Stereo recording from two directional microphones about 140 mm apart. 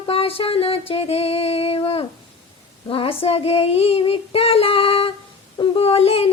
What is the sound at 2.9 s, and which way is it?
Female singing, 40° left (ahead or behind).